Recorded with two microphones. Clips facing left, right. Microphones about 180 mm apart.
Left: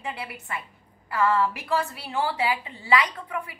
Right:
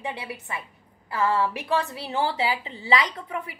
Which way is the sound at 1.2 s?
25° right (ahead or behind).